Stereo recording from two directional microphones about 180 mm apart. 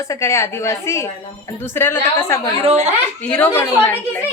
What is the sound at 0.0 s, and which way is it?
A woman's voice, 15° left (ahead or behind).